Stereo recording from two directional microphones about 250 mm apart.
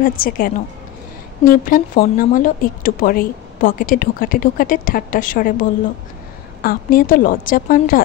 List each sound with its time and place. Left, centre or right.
0.0 s speech: left